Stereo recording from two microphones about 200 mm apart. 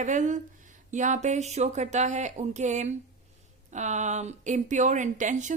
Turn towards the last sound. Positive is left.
turn(degrees=-40)  # may be behind; listen again after turning